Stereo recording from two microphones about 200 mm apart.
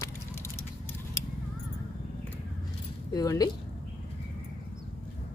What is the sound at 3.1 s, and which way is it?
Speech, 20° left (ahead or behind).